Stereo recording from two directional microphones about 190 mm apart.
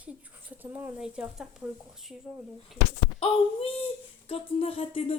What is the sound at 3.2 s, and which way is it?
Speech, 30° left (ahead or behind).